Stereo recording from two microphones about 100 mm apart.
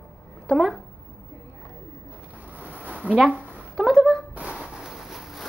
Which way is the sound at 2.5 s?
15° right (ahead or behind).